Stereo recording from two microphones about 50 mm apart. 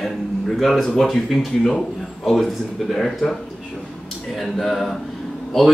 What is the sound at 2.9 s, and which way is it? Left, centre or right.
Speech, centre.